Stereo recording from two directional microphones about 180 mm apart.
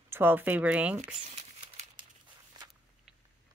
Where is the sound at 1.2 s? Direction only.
35° right (ahead or behind).